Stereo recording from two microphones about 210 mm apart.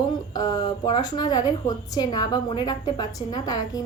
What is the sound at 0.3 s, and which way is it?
A woman's voice, 20° left (ahead or behind).